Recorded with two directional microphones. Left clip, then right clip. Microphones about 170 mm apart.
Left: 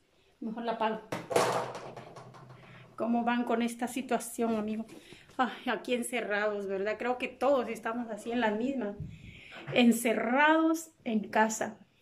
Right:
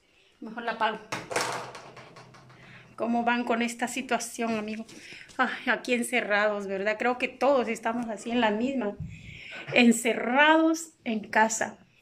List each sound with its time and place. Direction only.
0.6 s speech: 20° left (ahead or behind)
3.0 s a woman's voice: 10° left (ahead or behind)